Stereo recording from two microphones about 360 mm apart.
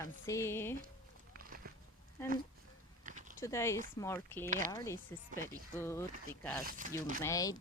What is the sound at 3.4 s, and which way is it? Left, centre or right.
Speech, centre.